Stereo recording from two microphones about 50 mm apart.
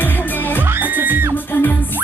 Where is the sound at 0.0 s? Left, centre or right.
Left.